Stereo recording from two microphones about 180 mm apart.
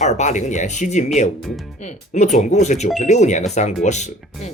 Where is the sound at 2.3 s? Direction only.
40° left (ahead or behind).